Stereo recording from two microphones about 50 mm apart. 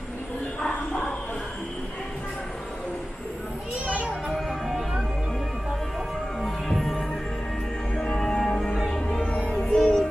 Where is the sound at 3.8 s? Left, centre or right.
Right.